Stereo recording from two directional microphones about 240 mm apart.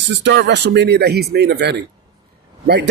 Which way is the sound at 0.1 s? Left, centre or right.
Right.